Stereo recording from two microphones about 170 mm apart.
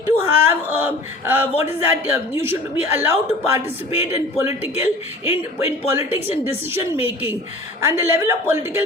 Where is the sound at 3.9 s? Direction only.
40° left (ahead or behind).